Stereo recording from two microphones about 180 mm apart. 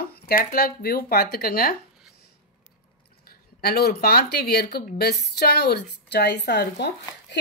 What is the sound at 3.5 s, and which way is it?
A woman's voice, 60° left (ahead or behind).